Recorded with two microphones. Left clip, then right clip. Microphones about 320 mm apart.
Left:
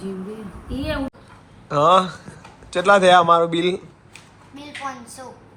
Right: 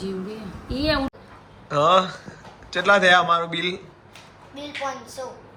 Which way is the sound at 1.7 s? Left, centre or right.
Centre.